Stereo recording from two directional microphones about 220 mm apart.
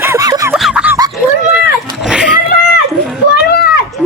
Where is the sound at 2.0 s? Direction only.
Centre (ahead or behind).